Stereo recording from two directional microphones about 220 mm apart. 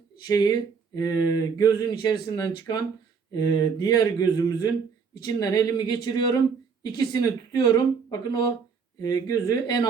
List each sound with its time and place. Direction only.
0.3 s speech: 20° left (ahead or behind)